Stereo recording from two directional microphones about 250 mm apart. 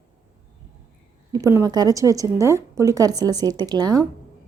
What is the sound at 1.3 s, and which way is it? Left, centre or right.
Speech, centre.